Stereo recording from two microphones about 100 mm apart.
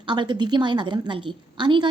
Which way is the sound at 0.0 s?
50° right (ahead or behind).